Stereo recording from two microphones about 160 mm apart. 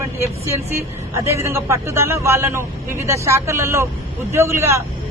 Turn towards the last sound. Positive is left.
turn(degrees=-15)  # may be behind; listen again after turning